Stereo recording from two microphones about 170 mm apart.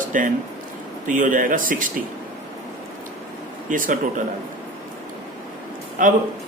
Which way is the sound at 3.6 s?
55° right (ahead or behind).